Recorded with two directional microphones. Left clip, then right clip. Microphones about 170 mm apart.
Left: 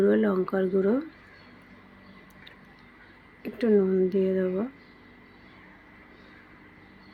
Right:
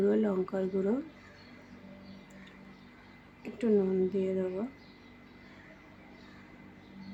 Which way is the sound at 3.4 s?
15° left (ahead or behind).